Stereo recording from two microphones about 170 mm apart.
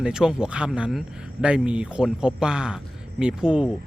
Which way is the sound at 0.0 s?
5° right (ahead or behind).